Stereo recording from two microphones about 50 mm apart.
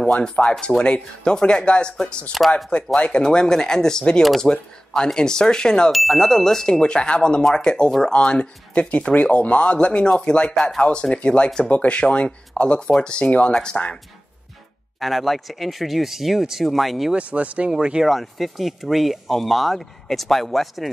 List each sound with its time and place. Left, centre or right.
0.0 s speech: centre
2.4 s speech: centre
3.0 s speech: centre
5.9 s speech: centre; by 10.5 s left
10.5 s speech: centre
10.8 s speech: centre
15.0 s speech: centre
17.1 s speech: right
17.6 s speech: centre
18.0 s speech: centre